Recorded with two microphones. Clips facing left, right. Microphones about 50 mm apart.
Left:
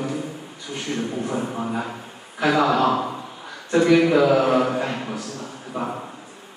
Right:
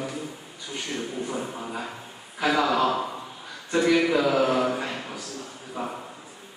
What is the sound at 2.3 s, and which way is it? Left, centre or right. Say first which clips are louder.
A man's voice: left 4 dB; centre.